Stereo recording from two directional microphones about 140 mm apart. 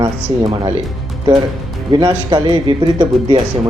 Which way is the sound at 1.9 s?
30° right (ahead or behind).